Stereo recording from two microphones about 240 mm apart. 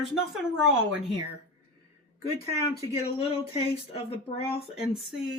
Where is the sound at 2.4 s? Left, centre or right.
Left.